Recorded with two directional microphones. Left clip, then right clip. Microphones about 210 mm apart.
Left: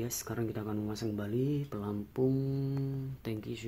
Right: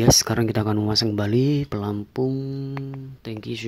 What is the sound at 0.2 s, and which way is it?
Speech, 30° right (ahead or behind).